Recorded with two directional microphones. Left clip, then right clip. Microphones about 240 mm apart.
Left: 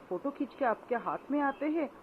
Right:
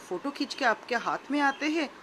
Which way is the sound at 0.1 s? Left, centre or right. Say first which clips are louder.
Right 3 dB; right.